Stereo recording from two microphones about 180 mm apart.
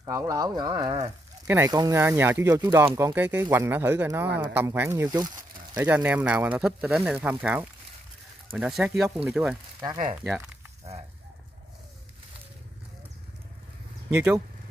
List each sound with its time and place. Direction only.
0.0 s speech: 20° right (ahead or behind); by 9.8 s centre (ahead or behind)
14.1 s speech: 10° right (ahead or behind)